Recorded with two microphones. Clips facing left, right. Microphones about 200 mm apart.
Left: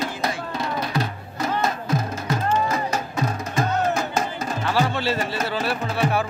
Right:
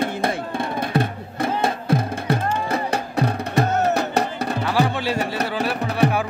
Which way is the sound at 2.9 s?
65° right (ahead or behind).